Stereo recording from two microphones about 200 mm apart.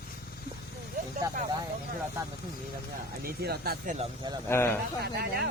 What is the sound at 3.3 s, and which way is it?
Speech, 50° right (ahead or behind).